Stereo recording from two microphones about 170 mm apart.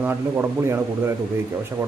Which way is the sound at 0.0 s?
10° right (ahead or behind).